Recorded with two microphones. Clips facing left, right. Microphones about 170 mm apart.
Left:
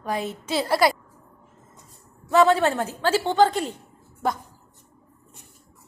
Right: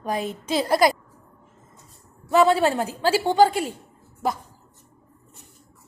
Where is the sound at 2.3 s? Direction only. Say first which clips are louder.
Even; 15° right (ahead or behind).